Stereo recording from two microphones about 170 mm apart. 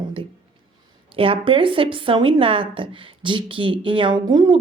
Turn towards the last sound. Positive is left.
turn(degrees=-25)  # may be behind; listen again after turning